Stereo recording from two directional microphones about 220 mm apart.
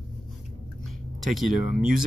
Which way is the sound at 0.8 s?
Centre (ahead or behind).